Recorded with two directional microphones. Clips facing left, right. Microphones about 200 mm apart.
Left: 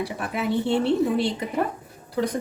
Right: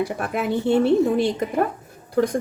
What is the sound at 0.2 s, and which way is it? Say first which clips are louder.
A woman's voice: right 2 dB; 50° right (ahead or behind).